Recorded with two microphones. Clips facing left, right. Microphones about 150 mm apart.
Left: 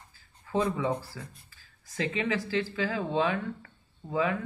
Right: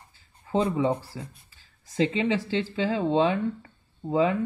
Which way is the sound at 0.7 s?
25° right (ahead or behind).